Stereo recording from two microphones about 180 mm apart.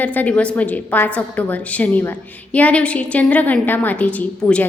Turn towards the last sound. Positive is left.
turn(degrees=5)  # may be behind; listen again after turning